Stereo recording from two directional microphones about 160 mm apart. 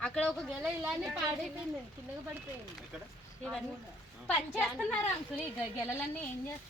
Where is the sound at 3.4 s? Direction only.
Centre (ahead or behind).